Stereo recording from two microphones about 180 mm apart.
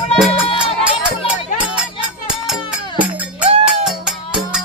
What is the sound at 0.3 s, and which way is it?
Music, 30° left (ahead or behind).